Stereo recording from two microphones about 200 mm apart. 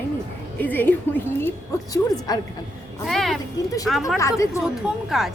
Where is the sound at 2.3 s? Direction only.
20° left (ahead or behind).